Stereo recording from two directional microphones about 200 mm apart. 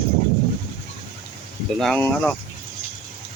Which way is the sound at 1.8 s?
5° left (ahead or behind).